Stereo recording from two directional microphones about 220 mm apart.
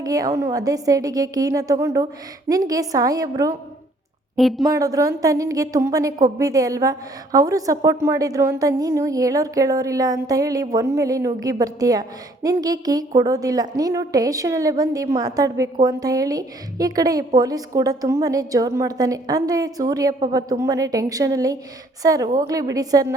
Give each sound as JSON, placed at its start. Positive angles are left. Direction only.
{"t": 0.0, "sound": "a woman's voice", "side_deg": -15}
{"t": 4.4, "sound": "a woman's voice", "side_deg": 0}
{"t": 4.6, "sound": "a woman's voice", "side_deg": -15}